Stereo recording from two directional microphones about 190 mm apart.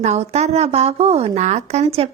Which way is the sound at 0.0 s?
35° right (ahead or behind).